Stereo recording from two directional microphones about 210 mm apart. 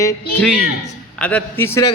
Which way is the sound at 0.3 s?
Centre (ahead or behind).